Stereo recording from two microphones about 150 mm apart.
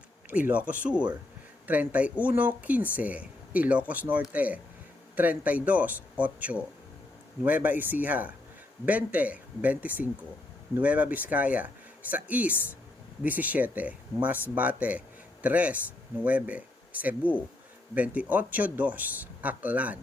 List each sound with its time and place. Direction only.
0.3 s speech: 10° right (ahead or behind)